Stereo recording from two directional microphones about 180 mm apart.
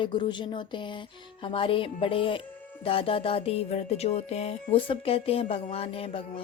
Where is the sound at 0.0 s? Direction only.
25° left (ahead or behind).